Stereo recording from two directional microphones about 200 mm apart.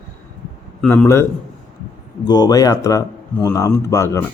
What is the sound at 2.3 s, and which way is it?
Speech, 20° left (ahead or behind).